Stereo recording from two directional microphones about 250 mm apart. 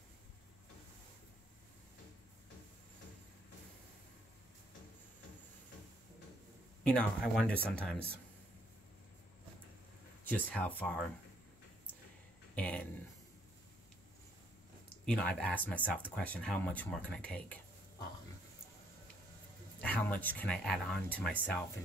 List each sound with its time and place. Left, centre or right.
6.8 s speech: centre
10.3 s speech: centre
12.5 s speech: centre
15.0 s speech: centre
19.8 s speech: centre